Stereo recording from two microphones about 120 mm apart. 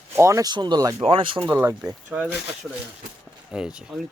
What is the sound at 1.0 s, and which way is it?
Speech, 50° right (ahead or behind).